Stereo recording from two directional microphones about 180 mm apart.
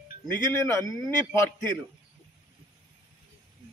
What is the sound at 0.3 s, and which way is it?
A man's voice, 15° left (ahead or behind).